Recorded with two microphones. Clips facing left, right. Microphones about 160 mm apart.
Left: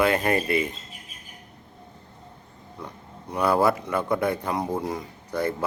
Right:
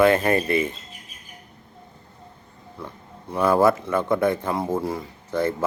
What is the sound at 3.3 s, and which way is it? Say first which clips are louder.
A man's voice: right 3 dB; 15° left (ahead or behind).